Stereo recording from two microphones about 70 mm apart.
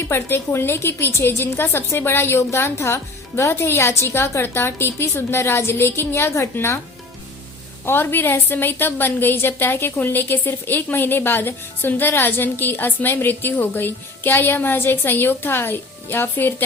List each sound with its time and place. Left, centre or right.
0.1 s a woman's voice: left
7.9 s a woman's voice: left